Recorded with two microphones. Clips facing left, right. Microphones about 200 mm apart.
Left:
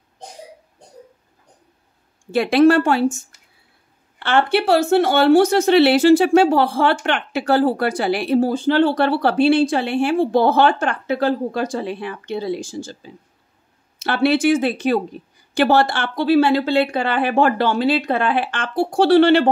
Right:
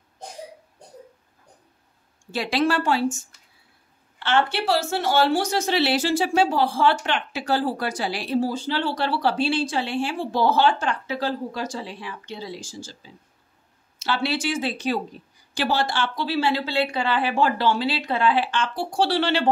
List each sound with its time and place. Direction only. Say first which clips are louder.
2.3 s speech: left 9 dB; 55° left (ahead or behind)
4.2 s speech: left 5 dB; 60° left (ahead or behind)